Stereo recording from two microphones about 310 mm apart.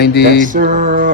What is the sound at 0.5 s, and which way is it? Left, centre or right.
Music, right.